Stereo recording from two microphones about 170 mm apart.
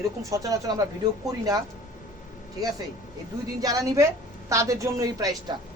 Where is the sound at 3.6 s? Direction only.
20° right (ahead or behind).